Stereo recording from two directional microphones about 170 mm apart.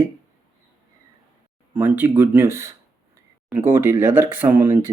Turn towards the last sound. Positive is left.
turn(degrees=-10)  # may be behind; listen again after turning